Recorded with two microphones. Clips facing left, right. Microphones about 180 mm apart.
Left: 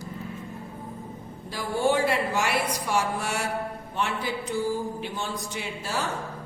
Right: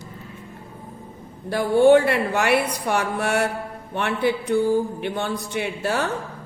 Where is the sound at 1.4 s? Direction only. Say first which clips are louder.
Right 10 dB; 60° right (ahead or behind).